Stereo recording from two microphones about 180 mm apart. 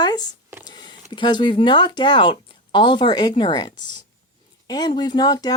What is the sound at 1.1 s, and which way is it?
Speech, 25° left (ahead or behind).